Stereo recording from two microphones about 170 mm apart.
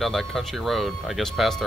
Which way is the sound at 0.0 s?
Centre (ahead or behind).